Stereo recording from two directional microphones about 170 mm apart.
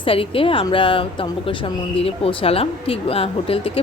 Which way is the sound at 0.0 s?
30° left (ahead or behind).